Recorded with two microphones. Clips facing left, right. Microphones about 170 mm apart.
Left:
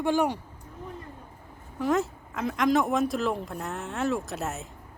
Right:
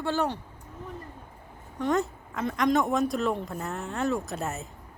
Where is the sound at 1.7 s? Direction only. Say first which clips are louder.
Left 1 dB; centre (ahead or behind).